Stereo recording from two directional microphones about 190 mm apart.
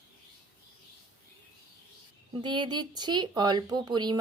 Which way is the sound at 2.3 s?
25° right (ahead or behind).